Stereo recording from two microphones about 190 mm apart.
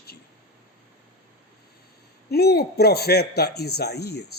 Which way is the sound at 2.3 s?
55° left (ahead or behind).